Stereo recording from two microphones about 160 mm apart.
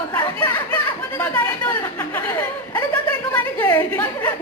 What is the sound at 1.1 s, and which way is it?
Speech, 10° left (ahead or behind).